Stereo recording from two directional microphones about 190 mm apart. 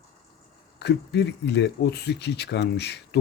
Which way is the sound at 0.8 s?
60° left (ahead or behind).